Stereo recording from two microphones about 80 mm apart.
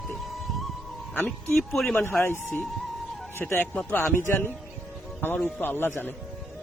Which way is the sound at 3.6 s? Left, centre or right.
Centre.